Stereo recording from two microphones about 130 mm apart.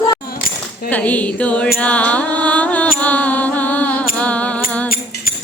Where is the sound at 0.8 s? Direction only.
10° left (ahead or behind).